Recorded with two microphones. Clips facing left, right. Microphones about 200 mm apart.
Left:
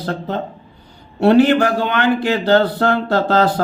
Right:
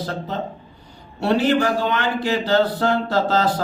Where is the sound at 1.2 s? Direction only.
60° left (ahead or behind).